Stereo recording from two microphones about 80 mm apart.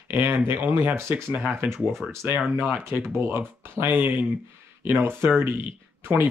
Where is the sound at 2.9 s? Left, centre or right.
Right.